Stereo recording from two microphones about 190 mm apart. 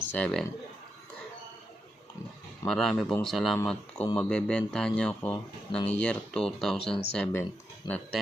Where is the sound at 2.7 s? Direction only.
5° left (ahead or behind).